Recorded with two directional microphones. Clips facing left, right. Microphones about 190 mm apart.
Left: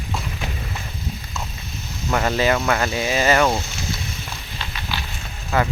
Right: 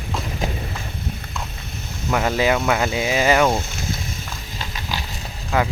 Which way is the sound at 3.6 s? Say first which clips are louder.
Right 1 dB; 50° right (ahead or behind).